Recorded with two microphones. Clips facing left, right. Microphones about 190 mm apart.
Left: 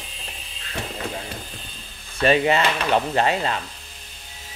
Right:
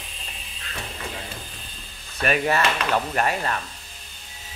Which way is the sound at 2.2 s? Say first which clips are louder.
Left 4 dB; 25° left (ahead or behind).